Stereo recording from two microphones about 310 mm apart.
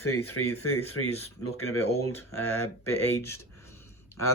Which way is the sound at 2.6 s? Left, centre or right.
Centre.